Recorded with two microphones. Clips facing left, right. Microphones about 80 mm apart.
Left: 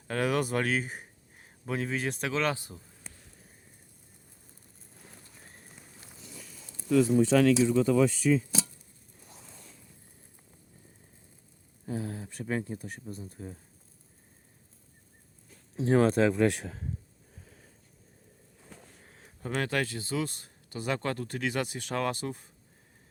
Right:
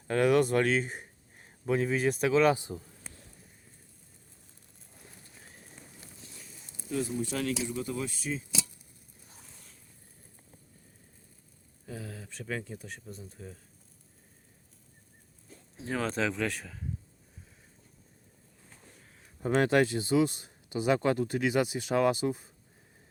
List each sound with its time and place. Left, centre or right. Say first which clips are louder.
0.1 s speech: right 4 dB; centre
6.8 s speech: left 9 dB; left
11.9 s a sound: left 7 dB; left
12.2 s speech: left 4 dB; left
13.1 s speech: left 4 dB; left
15.8 s speech: left 8 dB; left
16.4 s speech: left 7 dB; left
19.0 s a sound: left 3 dB; left
19.4 s speech: right 6 dB; right; by 22.4 s centre